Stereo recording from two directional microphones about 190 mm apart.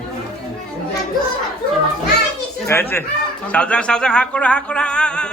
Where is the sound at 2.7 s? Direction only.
10° left (ahead or behind).